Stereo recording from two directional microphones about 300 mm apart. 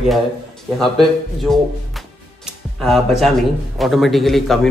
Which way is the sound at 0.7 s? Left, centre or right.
Centre.